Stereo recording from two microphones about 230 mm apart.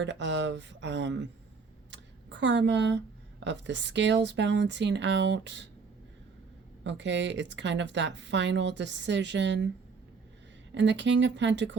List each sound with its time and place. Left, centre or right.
0.0 s speech: right
1.9 s a sound: right
3.4 s speech: right
6.8 s speech: right
10.8 s speech: right